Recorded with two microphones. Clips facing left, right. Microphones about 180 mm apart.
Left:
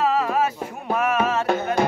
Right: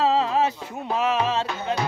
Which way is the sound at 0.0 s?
25° right (ahead or behind).